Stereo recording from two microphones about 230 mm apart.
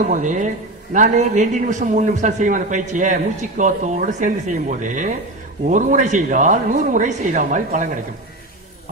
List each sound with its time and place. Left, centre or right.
0.0 s a man's voice: right